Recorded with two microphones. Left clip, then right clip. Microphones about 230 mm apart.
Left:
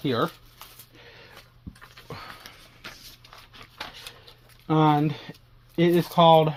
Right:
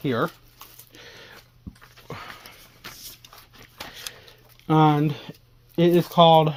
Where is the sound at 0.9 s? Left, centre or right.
Right.